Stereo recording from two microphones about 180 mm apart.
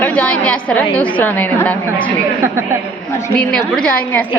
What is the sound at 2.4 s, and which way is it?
Speech, 15° right (ahead or behind).